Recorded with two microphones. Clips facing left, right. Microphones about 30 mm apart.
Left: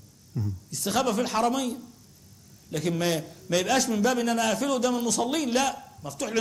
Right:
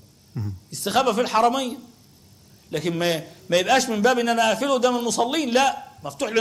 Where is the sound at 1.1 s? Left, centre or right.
Centre.